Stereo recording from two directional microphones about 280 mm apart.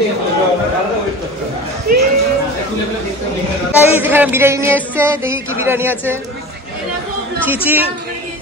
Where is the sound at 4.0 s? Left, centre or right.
Centre.